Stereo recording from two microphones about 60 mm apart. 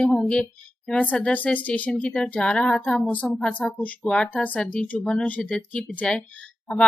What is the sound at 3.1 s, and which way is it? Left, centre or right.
A woman's voice, left.